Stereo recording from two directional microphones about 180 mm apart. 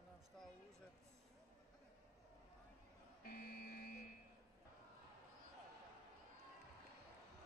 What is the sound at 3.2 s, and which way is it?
Buzzer, 55° left (ahead or behind).